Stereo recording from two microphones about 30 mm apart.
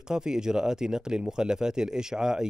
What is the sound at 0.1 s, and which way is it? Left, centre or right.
Speech, right.